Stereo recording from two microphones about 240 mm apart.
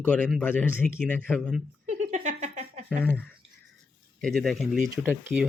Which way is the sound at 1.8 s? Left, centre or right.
Right.